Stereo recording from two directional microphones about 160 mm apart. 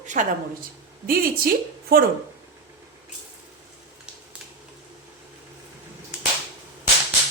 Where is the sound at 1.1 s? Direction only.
65° right (ahead or behind).